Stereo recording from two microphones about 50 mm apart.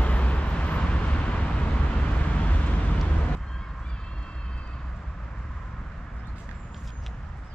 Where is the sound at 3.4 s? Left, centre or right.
Centre.